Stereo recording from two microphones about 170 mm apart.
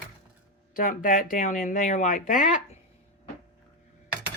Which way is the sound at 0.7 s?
55° left (ahead or behind).